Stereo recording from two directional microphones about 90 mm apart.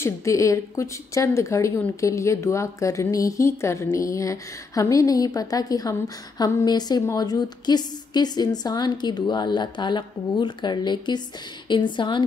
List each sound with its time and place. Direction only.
0.0 s a woman's voice: 35° left (ahead or behind); by 12.2 s 60° left (ahead or behind)